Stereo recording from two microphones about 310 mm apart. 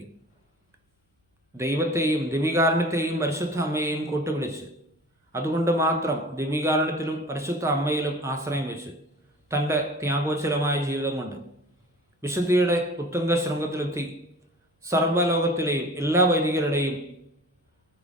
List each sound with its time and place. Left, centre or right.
1.5 s a man's voice: centre
12.2 s a man's voice: centre